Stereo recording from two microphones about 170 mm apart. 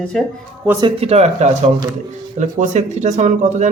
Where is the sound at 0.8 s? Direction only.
35° right (ahead or behind).